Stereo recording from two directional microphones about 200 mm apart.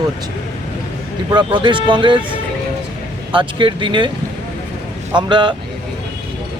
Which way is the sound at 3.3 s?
25° right (ahead or behind).